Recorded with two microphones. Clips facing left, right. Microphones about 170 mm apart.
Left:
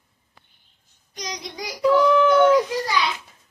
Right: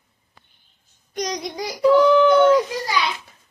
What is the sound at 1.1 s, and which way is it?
Child singing, 60° right (ahead or behind).